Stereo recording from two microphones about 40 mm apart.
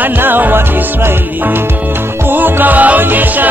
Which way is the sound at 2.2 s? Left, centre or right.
Right.